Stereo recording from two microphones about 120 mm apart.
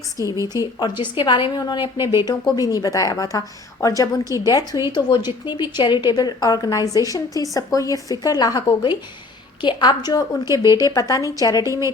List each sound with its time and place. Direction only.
0.2 s a woman's voice: 25° right (ahead or behind)
0.5 s a woman's voice: 35° left (ahead or behind)
11.6 s a woman's voice: 25° right (ahead or behind)